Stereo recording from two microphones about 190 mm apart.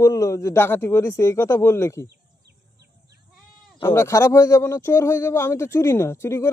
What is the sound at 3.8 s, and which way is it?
Speech, 20° left (ahead or behind).